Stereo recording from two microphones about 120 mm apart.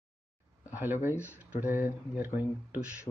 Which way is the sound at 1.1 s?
20° left (ahead or behind).